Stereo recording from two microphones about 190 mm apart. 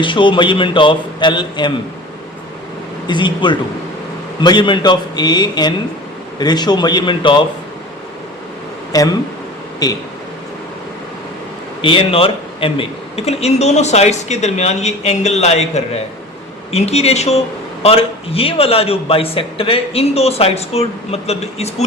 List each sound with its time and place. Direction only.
0.0 s a man's voice: 25° left (ahead or behind)
3.1 s a man's voice: 25° left (ahead or behind)
8.9 s a man's voice: 20° left (ahead or behind)
11.8 s speech: 30° left (ahead or behind)